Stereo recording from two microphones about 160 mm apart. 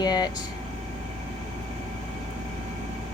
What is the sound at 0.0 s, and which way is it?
Air conditioning, 25° left (ahead or behind).